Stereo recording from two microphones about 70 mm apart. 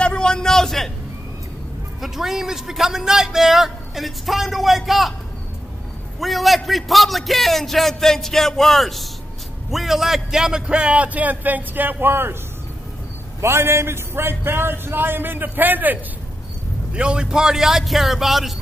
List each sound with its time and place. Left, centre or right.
0.0 s a sound: centre
2.0 s a man's voice: centre
6.1 s a man's voice: centre; by 12.4 s right
13.4 s a man's voice: right
16.9 s a man's voice: centre